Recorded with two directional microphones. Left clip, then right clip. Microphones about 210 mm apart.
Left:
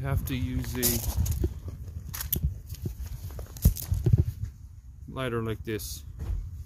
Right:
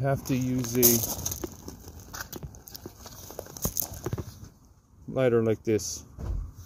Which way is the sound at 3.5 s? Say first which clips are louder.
Even; 35° right (ahead or behind).